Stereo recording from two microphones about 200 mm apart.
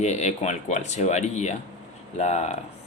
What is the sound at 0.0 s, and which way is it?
Speech, 35° left (ahead or behind).